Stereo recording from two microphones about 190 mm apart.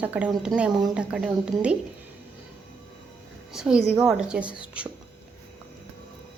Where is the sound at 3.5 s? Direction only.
5° right (ahead or behind).